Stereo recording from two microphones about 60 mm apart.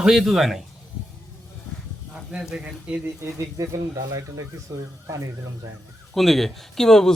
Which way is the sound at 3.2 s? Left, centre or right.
Right.